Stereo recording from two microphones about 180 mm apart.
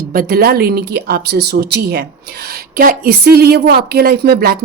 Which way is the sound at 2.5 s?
50° right (ahead or behind).